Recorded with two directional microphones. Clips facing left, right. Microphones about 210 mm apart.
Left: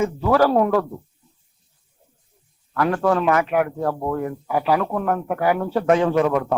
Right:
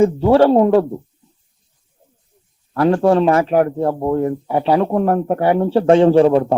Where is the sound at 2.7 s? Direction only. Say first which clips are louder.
Right 6 dB; 30° right (ahead or behind).